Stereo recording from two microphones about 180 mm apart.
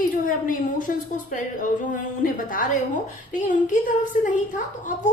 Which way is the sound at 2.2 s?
50° left (ahead or behind).